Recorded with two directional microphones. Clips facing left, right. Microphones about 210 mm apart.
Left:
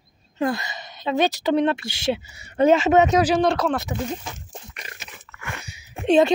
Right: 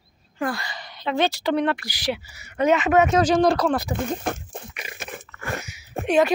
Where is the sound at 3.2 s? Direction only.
5° left (ahead or behind).